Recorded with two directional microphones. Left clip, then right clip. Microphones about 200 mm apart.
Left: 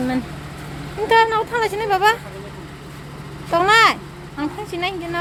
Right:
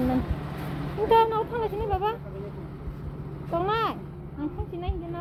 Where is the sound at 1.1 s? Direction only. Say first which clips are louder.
Left 6 dB; 25° left (ahead or behind).